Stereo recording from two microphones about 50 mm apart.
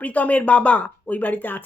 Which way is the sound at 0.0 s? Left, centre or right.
Left.